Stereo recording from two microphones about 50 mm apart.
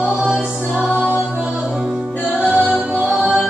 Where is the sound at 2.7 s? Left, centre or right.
Right.